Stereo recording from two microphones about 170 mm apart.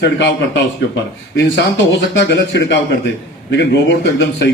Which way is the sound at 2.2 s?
90° left.